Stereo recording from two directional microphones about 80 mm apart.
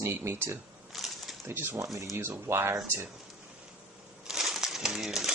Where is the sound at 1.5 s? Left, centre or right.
Right.